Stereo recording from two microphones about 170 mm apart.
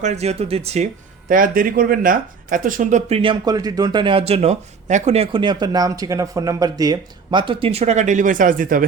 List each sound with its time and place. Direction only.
0.0 s speech: 40° right (ahead or behind)
1.3 s speech: 55° right (ahead or behind)
3.2 s a man's voice: 25° right (ahead or behind); by 8.8 s 55° right (ahead or behind)